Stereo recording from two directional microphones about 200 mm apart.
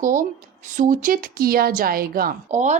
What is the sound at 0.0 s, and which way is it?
Speech, 40° right (ahead or behind).